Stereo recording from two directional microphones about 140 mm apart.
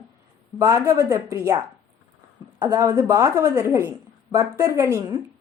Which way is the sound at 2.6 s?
25° right (ahead or behind).